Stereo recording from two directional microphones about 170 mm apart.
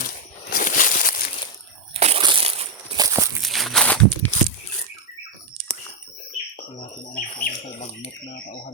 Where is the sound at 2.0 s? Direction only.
35° right (ahead or behind).